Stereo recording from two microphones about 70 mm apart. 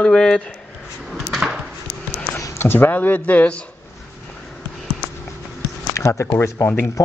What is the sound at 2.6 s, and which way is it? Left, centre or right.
Speech, left.